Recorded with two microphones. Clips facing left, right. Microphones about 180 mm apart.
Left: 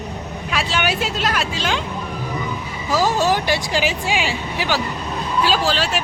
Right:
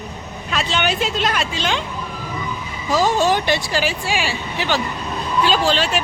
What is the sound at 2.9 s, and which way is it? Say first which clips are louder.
Speech: right 1 dB; 5° left (ahead or behind).